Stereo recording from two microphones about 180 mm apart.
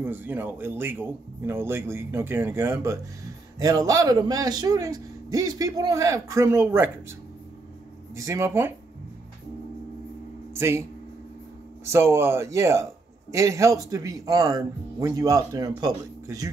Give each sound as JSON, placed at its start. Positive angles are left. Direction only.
{"t": 0.0, "sound": "a man's voice", "side_deg": -10}
{"t": 8.2, "sound": "speech", "side_deg": -15}
{"t": 10.5, "sound": "a man's voice", "side_deg": -15}